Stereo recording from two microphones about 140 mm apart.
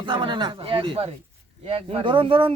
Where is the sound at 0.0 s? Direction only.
35° right (ahead or behind).